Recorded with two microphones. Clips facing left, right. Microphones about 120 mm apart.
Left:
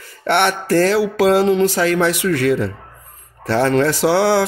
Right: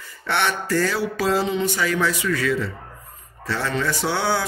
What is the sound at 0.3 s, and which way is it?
Speech, 65° left (ahead or behind).